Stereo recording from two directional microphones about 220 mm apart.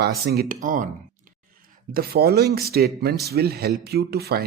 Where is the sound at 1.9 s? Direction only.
45° right (ahead or behind).